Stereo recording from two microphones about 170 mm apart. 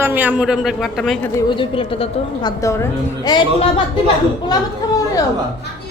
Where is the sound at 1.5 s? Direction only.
30° left (ahead or behind).